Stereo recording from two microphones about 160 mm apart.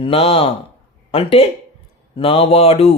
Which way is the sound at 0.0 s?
35° left (ahead or behind).